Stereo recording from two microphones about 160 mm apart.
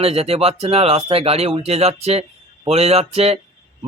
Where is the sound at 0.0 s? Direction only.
40° right (ahead or behind).